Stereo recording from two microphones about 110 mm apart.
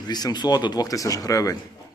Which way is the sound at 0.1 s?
40° left (ahead or behind).